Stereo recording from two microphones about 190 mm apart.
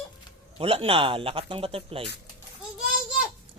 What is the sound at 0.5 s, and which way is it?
Speech, 30° right (ahead or behind).